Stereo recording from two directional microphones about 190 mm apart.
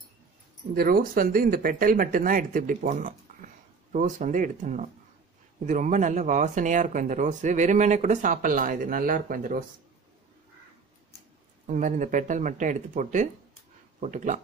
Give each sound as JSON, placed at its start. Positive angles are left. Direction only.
{"t": 0.7, "sound": "speech", "side_deg": -50}
{"t": 11.6, "sound": "speech", "side_deg": -45}